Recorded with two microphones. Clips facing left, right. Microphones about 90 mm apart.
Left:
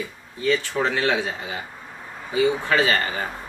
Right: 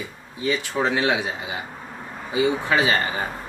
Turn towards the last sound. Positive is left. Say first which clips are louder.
# even
turn(degrees=-15)  # may be behind; listen again after turning